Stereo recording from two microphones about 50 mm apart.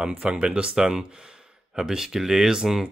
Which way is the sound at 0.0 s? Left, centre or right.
Centre.